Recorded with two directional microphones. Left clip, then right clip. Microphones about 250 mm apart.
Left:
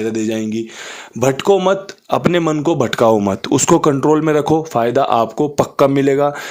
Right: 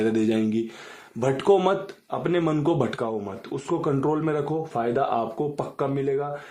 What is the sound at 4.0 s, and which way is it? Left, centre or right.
Speech, left.